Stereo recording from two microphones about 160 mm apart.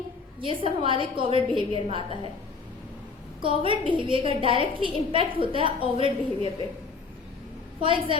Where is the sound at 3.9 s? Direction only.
35° right (ahead or behind).